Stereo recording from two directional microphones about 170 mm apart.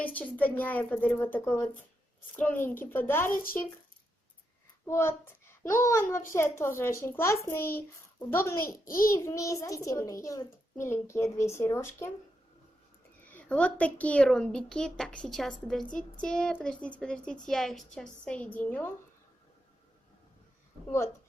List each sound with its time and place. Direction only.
0.0 s a child's voice: 10° left (ahead or behind)
4.9 s a child's voice: 15° left (ahead or behind)
13.3 s a woman's voice: 10° left (ahead or behind)